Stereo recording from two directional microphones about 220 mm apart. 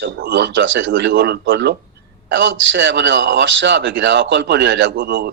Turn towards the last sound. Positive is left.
turn(degrees=-45)  # may be behind; listen again after turning